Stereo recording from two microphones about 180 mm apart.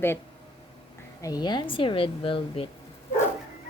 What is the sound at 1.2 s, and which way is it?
Speech, 20° left (ahead or behind).